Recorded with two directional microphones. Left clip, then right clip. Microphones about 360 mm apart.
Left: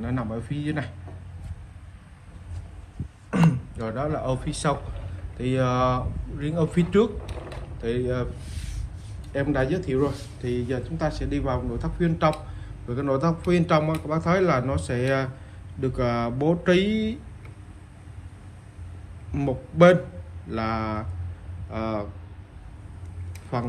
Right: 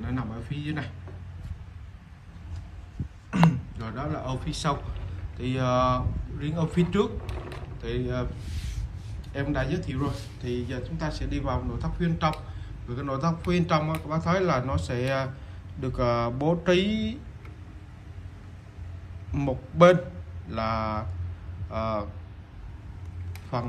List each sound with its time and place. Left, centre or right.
0.0 s a man's voice: centre
3.3 s speech: centre
9.3 s speech: centre
19.3 s speech: centre
23.5 s speech: centre